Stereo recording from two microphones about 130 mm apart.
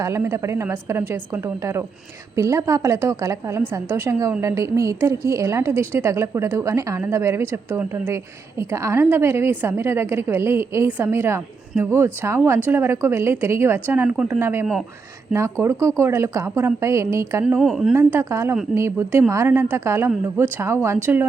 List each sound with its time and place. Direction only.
0.0 s a woman's voice: 20° right (ahead or behind)
2.3 s a woman's voice: 25° right (ahead or behind)
17.6 s speech: centre (ahead or behind)
17.9 s a woman's voice: 20° right (ahead or behind)